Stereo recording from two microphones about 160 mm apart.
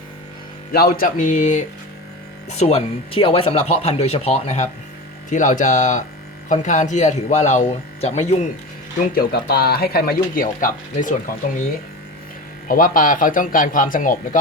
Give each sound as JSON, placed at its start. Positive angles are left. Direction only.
{"t": 0.7, "sound": "speech", "side_deg": 70}
{"t": 9.1, "sound": "speech", "side_deg": 80}
{"t": 12.6, "sound": "speech", "side_deg": 60}